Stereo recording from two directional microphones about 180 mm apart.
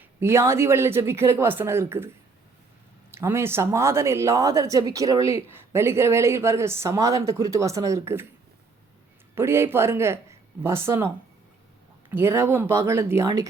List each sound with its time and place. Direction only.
0.0 s speech: 15° right (ahead or behind)
3.1 s speech: 15° right (ahead or behind)
9.3 s speech: 15° right (ahead or behind)
12.1 s speech: 15° right (ahead or behind)